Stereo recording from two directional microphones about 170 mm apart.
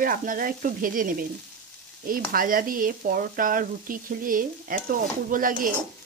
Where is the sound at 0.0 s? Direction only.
55° right (ahead or behind).